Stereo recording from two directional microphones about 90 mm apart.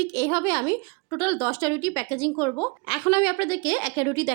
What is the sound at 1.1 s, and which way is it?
Speech, 20° left (ahead or behind).